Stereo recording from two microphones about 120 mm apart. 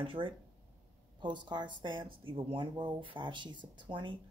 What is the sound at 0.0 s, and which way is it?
Speech, 45° right (ahead or behind).